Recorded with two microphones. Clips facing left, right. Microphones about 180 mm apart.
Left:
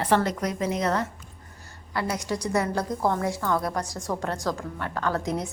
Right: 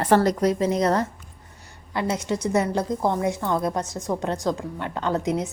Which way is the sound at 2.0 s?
25° right (ahead or behind).